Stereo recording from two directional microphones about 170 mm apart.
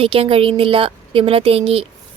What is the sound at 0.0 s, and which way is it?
A woman's voice, 35° right (ahead or behind).